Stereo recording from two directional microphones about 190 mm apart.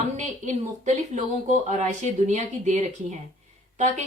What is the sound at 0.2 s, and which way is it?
Speech, 40° right (ahead or behind).